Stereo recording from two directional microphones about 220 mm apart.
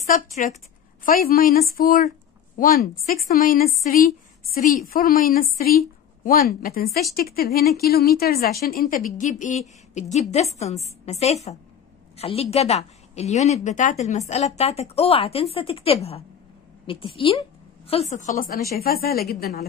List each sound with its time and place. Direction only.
0.1 s a woman's voice: 30° left (ahead or behind)